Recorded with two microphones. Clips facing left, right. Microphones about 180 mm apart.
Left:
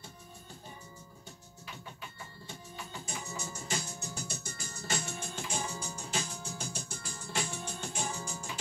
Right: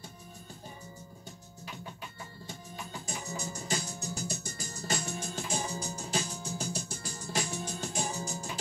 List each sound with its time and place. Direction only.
3.1 s music: 35° right (ahead or behind)